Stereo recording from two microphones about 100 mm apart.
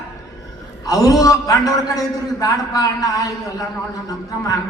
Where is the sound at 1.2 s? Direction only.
35° left (ahead or behind).